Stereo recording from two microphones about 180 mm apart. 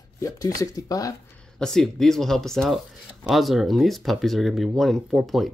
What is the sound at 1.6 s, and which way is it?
Speech, centre (ahead or behind).